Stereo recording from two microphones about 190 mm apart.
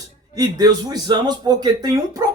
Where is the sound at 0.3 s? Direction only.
20° right (ahead or behind).